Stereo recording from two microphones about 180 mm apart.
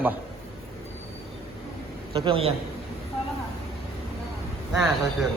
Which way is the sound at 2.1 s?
30° right (ahead or behind).